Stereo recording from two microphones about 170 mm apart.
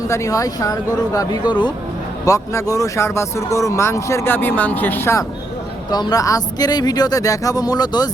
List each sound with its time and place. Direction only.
0.1 s speech: 20° left (ahead or behind)